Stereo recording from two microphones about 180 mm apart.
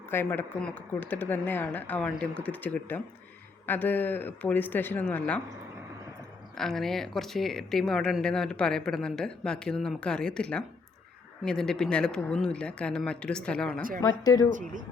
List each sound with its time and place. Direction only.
0.1 s speech: 10° left (ahead or behind)
6.6 s speech: centre (ahead or behind)
14.0 s speech: 20° left (ahead or behind)